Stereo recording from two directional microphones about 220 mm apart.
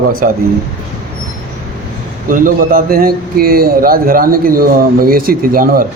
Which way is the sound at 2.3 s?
40° right (ahead or behind).